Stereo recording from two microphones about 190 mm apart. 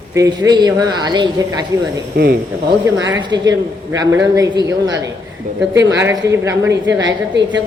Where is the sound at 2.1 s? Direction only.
55° right (ahead or behind).